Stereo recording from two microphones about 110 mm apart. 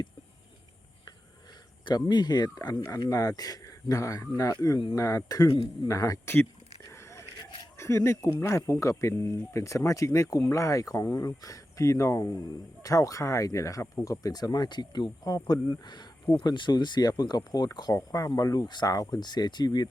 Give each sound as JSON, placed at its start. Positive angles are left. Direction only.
{"t": 1.8, "sound": "speech", "side_deg": 45}
{"t": 6.8, "sound": "a sound", "side_deg": 25}
{"t": 7.8, "sound": "speech", "side_deg": 25}
{"t": 15.8, "sound": "speech", "side_deg": 40}